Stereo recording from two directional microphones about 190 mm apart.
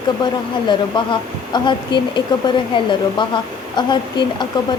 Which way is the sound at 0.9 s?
25° left (ahead or behind).